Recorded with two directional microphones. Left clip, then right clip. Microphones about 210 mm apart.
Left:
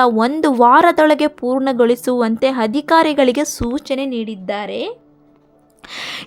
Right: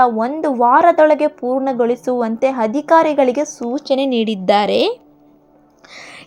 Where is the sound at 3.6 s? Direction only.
45° left (ahead or behind).